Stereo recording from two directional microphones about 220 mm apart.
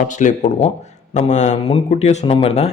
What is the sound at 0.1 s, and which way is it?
A man's voice, 35° left (ahead or behind).